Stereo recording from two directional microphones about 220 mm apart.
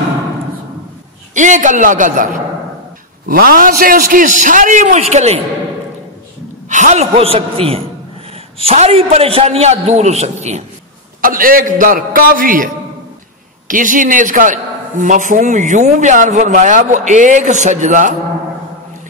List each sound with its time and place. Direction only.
1.3 s a man's voice: 35° right (ahead or behind)
3.3 s a man's voice: 40° right (ahead or behind)
6.7 s a man's voice: 35° right (ahead or behind)
11.1 s a man's voice: 40° right (ahead or behind)
13.7 s a man's voice: 35° right (ahead or behind)